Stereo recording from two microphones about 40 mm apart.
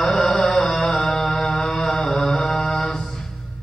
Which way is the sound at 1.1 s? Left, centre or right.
Centre.